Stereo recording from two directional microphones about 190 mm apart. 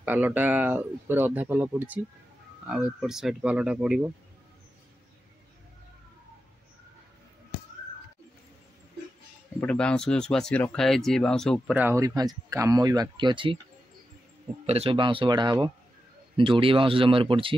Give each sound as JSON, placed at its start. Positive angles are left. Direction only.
{"t": 0.0, "sound": "speech", "side_deg": -10}
{"t": 9.6, "sound": "speech", "side_deg": 5}
{"t": 11.7, "sound": "speech", "side_deg": -10}
{"t": 14.7, "sound": "speech", "side_deg": -30}